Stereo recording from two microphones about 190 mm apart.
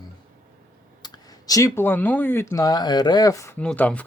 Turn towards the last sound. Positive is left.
turn(degrees=10)  # may be behind; listen again after turning